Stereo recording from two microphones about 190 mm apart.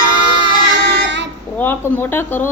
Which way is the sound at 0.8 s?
70° right (ahead or behind).